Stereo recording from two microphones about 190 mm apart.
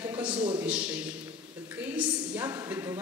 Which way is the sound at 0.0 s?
10° right (ahead or behind).